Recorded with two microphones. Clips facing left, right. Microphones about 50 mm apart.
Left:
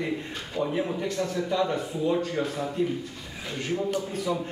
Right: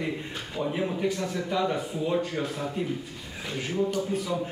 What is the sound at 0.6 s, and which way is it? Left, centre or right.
Speech, right.